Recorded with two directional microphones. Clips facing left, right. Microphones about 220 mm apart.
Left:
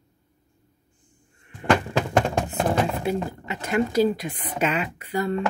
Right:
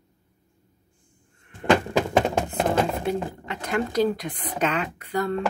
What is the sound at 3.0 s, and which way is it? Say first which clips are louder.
Speech: left 1 dB; 5° left (ahead or behind).